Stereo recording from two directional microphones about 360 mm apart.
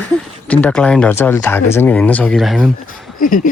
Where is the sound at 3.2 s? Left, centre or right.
Left.